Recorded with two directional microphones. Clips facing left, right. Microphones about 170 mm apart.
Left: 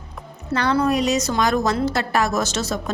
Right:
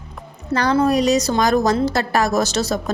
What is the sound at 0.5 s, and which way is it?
A woman's voice, 40° right (ahead or behind).